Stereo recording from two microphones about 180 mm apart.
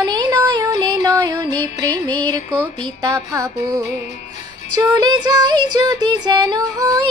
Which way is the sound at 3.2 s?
15° right (ahead or behind).